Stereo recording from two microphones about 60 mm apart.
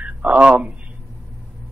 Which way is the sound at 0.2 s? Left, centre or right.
Right.